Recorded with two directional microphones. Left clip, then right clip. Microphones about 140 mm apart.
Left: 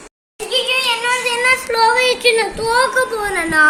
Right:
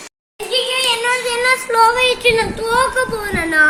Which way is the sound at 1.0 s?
5° left (ahead or behind).